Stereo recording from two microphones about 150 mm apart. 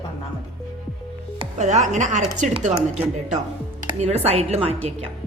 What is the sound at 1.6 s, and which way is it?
Speech, 55° right (ahead or behind).